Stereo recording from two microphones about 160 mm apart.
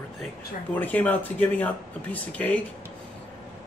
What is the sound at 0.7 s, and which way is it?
A man's voice, 10° left (ahead or behind).